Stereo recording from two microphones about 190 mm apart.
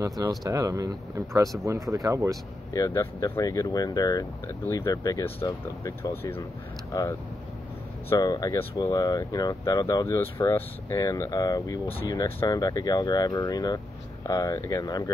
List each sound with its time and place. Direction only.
0.2 s speech: 20° right (ahead or behind)
2.7 s speech: 15° left (ahead or behind)